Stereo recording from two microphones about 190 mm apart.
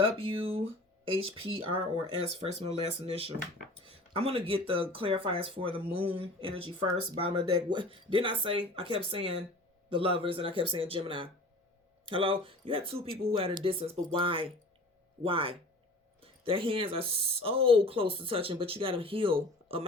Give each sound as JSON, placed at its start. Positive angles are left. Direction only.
{"t": 0.0, "sound": "speech", "side_deg": -30}